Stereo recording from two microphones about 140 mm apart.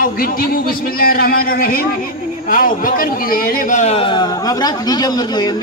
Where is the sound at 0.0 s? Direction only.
90° left.